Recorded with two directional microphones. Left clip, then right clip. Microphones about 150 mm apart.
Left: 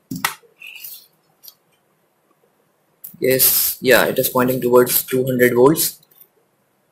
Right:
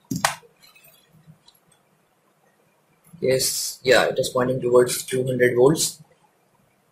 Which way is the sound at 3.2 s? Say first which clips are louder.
Left 4 dB; 45° left (ahead or behind).